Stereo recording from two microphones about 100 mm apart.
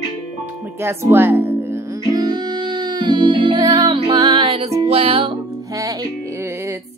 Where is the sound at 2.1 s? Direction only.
45° right (ahead or behind).